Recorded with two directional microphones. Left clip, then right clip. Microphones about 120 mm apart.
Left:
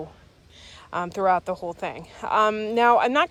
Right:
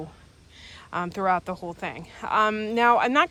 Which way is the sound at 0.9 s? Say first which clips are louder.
Left 3 dB; 35° left (ahead or behind).